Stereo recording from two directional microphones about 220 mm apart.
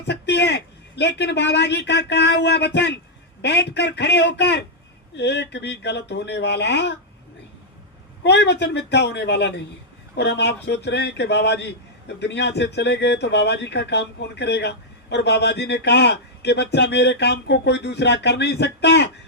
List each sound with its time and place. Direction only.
0.0 s speech: 50° left (ahead or behind)
8.2 s speech: 50° left (ahead or behind)